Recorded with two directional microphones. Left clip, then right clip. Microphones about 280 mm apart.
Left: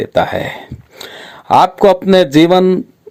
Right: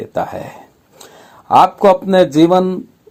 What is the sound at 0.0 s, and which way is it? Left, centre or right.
Speech, left.